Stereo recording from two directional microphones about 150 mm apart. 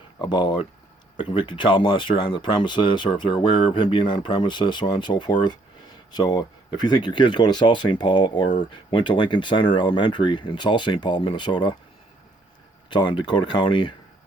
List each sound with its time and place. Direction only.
0.2 s speech: 30° left (ahead or behind)
12.9 s speech: 30° left (ahead or behind)